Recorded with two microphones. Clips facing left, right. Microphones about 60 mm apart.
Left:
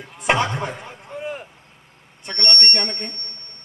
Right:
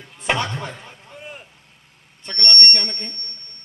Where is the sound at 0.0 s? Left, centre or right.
Centre.